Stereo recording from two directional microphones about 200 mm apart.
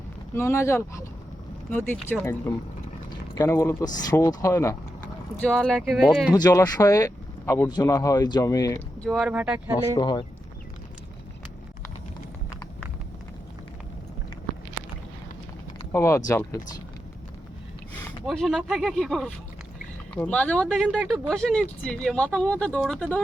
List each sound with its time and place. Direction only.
0.3 s speech: 15° left (ahead or behind)
5.4 s speech: 5° left (ahead or behind)
6.3 s speech: 15° left (ahead or behind)
9.0 s speech: centre (ahead or behind)
9.9 s speech: 20° left (ahead or behind)
15.9 s speech: 15° left (ahead or behind)
18.3 s speech: centre (ahead or behind)